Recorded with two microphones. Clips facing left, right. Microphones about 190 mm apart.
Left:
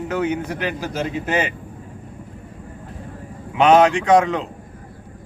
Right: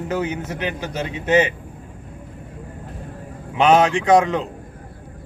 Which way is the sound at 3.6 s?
Centre (ahead or behind).